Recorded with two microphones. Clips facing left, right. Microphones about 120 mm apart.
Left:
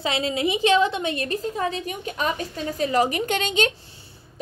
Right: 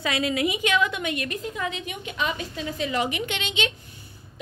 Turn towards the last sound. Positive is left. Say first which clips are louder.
# left 6 dB
turn(degrees=40)  # may be behind; listen again after turning